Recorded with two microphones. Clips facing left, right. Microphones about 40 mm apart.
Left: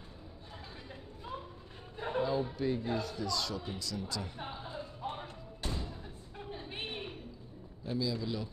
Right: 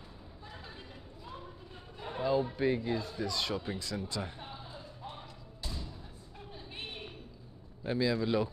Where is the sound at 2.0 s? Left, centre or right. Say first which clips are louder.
Left 5 dB; left.